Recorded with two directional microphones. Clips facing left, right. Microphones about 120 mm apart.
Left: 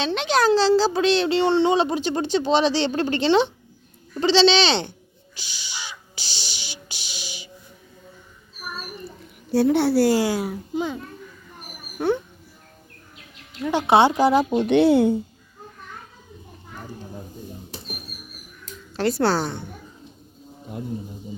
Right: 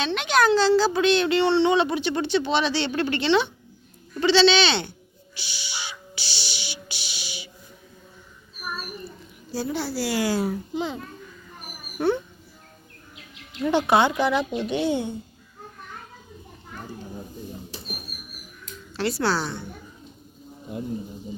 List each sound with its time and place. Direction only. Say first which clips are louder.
0.0 s speech: left 1 dB; 35° left (ahead or behind)
5.3 s crow: right 1 dB; 45° left (ahead or behind)
9.5 s a woman's voice: left 10 dB; 65° left (ahead or behind)
10.2 s speech: even; 10° left (ahead or behind)
11.9 s speech: left 1 dB; 15° left (ahead or behind)
13.8 s speech: left 7 dB; 30° left (ahead or behind)
14.5 s speech: left 8 dB; 60° left (ahead or behind); by 15.2 s 90° left
18.9 s a woman's voice: left 4 dB; 45° left (ahead or behind)